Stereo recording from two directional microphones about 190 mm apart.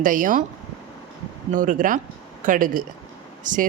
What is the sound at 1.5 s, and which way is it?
Speech, 45° right (ahead or behind).